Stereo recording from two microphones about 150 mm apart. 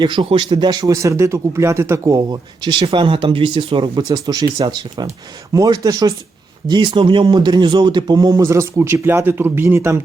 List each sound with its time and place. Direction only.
0.0 s speech: 30° right (ahead or behind); by 10.0 s 15° right (ahead or behind)